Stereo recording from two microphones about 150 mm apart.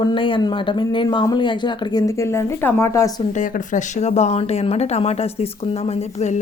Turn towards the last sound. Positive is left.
turn(degrees=45)  # may be behind; listen again after turning